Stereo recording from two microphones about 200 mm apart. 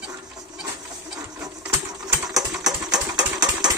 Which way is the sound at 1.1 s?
20° right (ahead or behind).